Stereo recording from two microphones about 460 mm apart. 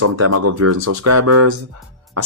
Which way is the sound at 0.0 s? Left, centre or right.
Right.